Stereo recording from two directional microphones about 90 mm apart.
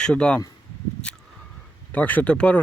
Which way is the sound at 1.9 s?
15° left (ahead or behind).